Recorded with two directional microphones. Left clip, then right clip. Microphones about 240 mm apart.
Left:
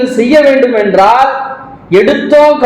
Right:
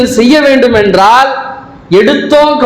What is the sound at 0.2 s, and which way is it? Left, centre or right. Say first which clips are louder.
A man's voice: left 1 dB; right.